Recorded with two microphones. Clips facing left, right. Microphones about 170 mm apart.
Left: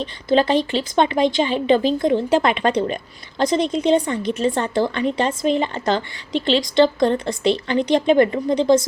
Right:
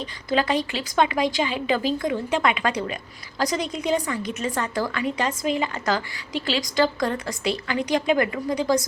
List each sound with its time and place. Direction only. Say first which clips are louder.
0.0 s speech: left 6 dB; 30° left (ahead or behind)